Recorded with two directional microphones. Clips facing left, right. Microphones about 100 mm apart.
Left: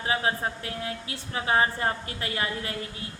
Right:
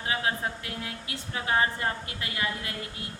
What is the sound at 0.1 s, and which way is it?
A woman's voice, 30° left (ahead or behind).